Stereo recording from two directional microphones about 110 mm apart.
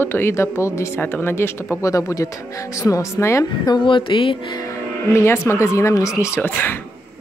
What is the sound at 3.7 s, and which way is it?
Speech, 50° left (ahead or behind).